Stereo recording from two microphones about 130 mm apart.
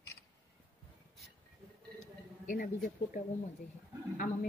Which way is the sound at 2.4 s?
90° left.